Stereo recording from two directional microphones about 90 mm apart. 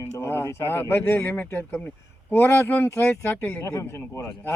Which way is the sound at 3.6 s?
30° left (ahead or behind).